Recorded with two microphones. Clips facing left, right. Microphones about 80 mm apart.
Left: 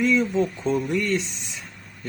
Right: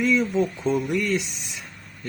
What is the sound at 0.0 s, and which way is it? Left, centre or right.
Speech, centre.